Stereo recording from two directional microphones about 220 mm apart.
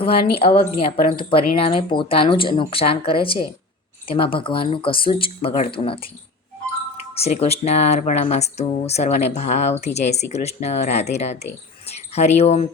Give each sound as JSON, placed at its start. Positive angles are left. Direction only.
{"t": 0.3, "sound": "speech", "side_deg": 25}
{"t": 7.2, "sound": "speech", "side_deg": 30}